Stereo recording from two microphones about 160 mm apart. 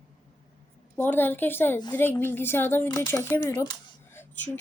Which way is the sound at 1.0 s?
10° left (ahead or behind).